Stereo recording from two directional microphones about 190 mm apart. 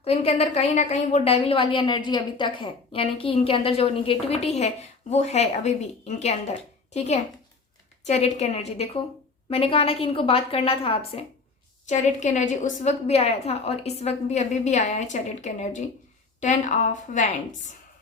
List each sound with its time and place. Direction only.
0.0 s a woman's voice: 35° left (ahead or behind)